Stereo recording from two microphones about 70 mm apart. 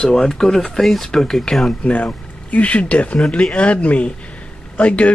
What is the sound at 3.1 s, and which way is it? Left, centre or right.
Speech, centre.